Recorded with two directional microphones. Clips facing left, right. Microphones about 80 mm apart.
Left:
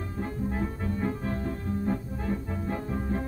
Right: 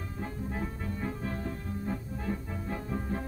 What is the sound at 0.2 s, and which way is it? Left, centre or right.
Music, left.